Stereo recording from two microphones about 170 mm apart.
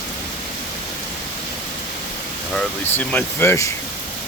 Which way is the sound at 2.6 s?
10° left (ahead or behind).